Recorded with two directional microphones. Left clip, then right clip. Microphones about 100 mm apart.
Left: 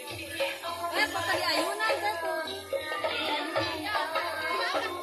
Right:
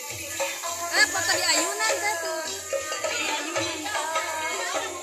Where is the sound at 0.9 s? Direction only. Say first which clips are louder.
Right 6 dB; 20° right (ahead or behind).